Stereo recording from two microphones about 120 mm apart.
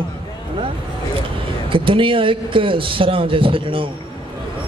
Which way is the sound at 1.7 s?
45° right (ahead or behind).